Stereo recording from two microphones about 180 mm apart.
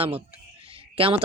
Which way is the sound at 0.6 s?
30° right (ahead or behind).